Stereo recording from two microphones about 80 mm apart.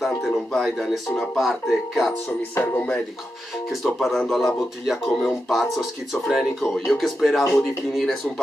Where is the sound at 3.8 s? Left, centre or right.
Centre.